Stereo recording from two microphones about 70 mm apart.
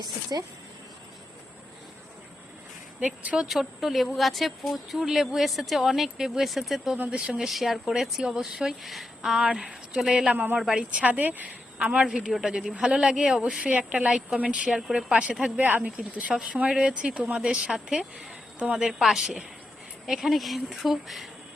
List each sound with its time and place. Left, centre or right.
0.0 s speech: right
3.0 s a woman's voice: centre
3.5 s speech: centre
6.9 s a woman's voice: centre
10.3 s a woman's voice: right
10.6 s speech: centre
10.9 s a woman's voice: right; by 15.0 s centre
15.1 s a woman's voice: centre
15.6 s a woman's voice: right; by 21.2 s centre